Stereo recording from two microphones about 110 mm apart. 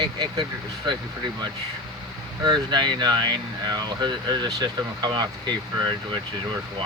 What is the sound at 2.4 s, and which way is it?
Speech, 40° right (ahead or behind).